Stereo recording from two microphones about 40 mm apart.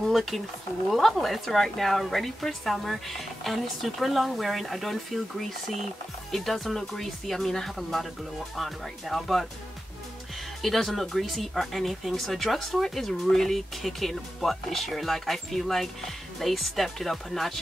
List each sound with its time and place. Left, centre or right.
0.1 s speech: centre
10.6 s speech: centre